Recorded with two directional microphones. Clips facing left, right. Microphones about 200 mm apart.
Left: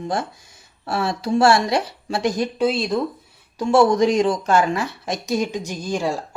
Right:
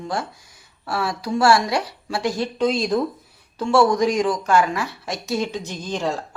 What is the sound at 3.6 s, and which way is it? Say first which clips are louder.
A woman's voice: left 2 dB; 20° left (ahead or behind).